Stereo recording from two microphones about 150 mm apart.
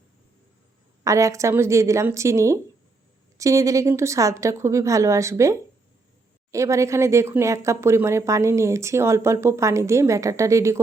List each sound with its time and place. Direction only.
1.0 s speech: 20° right (ahead or behind)